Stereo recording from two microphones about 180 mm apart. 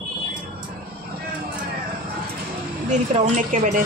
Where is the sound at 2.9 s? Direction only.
40° right (ahead or behind).